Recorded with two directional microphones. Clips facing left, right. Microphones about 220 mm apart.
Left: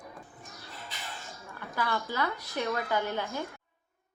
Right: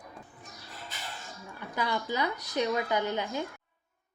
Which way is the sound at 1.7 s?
15° right (ahead or behind).